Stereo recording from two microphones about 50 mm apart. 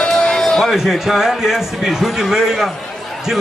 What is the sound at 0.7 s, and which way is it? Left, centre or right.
A man's voice, centre.